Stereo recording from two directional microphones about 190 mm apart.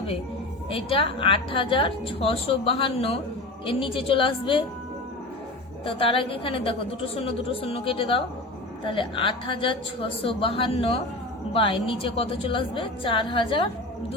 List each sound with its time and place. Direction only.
0.7 s a woman's voice: 30° left (ahead or behind)
5.8 s a woman's voice: 30° left (ahead or behind)